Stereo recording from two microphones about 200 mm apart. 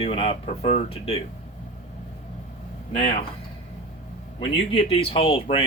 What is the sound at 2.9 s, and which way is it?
Speech, 30° left (ahead or behind).